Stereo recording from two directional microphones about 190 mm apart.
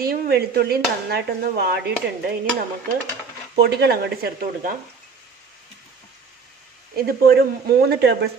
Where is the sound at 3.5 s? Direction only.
60° right (ahead or behind).